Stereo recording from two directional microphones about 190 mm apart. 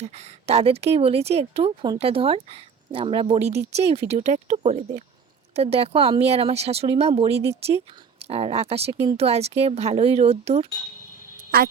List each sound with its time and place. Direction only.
0.0 s speech: 35° right (ahead or behind)
11.5 s music: 55° right (ahead or behind)